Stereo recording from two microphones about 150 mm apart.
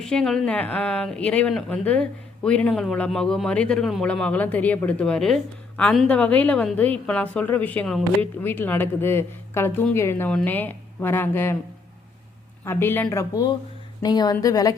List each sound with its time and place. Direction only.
0.0 s a woman's voice: 5° left (ahead or behind)
12.6 s speech: 15° left (ahead or behind)